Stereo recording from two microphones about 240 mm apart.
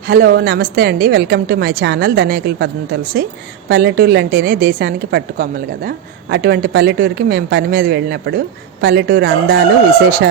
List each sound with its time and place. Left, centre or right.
0.1 s a woman's voice: right